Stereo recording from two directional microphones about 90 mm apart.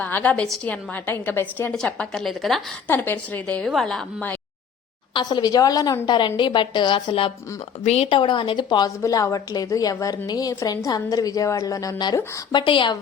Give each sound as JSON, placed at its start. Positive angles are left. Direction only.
{"t": 0.0, "sound": "a woman's voice", "side_deg": 20}
{"t": 1.7, "sound": "a woman's voice", "side_deg": 5}
{"t": 2.8, "sound": "a woman's voice", "side_deg": 25}
{"t": 3.4, "sound": "a woman's voice", "side_deg": 10}
{"t": 5.4, "sound": "a woman's voice", "side_deg": 40}
{"t": 9.0, "sound": "a woman's voice", "side_deg": 35}
{"t": 12.5, "sound": "a woman's voice", "side_deg": 65}